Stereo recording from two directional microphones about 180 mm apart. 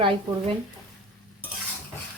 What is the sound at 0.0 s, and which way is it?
Speech, 30° right (ahead or behind).